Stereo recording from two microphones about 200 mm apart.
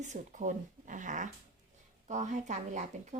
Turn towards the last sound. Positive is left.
turn(degrees=-35)  # may be behind; listen again after turning